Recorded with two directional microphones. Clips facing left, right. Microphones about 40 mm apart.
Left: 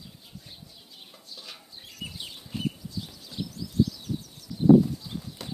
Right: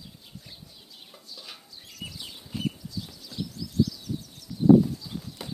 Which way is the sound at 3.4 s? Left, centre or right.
Left.